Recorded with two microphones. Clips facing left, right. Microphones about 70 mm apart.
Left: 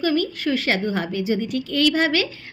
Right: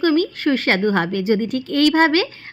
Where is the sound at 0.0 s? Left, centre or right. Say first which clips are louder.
Right 4 dB; right.